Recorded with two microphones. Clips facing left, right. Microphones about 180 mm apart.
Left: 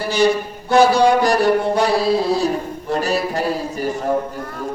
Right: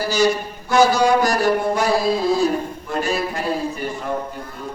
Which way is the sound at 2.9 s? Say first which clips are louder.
Left 3 dB; 40° left (ahead or behind).